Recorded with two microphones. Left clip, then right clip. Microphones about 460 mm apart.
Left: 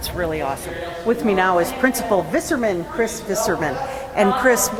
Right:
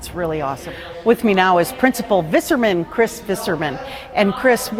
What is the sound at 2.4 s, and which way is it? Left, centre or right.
Speech, right.